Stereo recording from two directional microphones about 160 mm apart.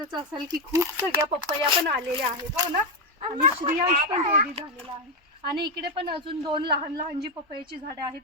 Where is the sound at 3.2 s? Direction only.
35° right (ahead or behind).